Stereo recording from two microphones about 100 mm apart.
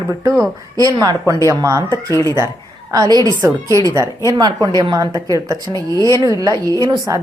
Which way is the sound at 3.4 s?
30° right (ahead or behind).